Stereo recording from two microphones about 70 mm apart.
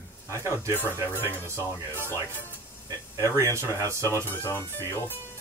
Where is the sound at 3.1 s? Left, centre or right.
Right.